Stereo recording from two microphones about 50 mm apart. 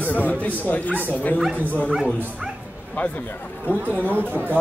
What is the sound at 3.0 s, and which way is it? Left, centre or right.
Speech, left.